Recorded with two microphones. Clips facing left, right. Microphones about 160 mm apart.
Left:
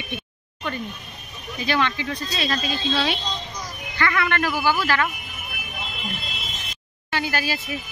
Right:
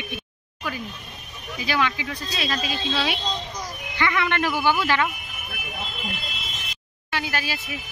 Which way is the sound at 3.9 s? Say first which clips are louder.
Left 1 dB; 20° right (ahead or behind).